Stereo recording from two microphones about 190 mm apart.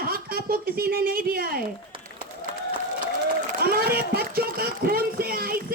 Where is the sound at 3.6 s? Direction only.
55° right (ahead or behind).